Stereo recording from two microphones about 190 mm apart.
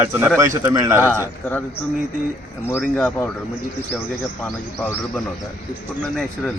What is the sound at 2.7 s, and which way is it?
Speech, 10° left (ahead or behind).